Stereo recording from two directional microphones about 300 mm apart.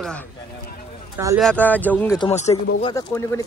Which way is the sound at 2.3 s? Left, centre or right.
Left.